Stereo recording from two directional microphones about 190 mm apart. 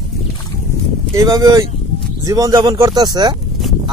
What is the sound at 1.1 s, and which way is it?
Speech, 15° right (ahead or behind).